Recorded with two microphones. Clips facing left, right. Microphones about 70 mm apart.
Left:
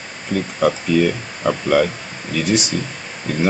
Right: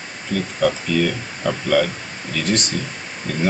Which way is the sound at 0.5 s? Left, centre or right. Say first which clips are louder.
Left 3 dB; centre.